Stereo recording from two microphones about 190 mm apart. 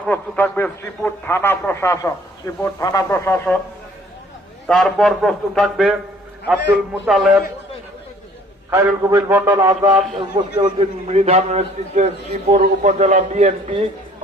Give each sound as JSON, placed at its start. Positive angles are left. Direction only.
{"t": 0.0, "sound": "a man's voice", "side_deg": 10}
{"t": 4.7, "sound": "speech", "side_deg": 0}
{"t": 7.0, "sound": "speech", "side_deg": -5}
{"t": 8.7, "sound": "a man's voice", "side_deg": -15}
{"t": 10.6, "sound": "a man's voice", "side_deg": -35}